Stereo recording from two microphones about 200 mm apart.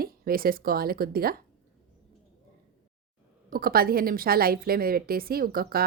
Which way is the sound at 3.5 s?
50° right (ahead or behind).